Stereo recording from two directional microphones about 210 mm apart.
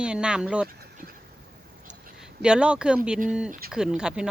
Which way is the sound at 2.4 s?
5° right (ahead or behind).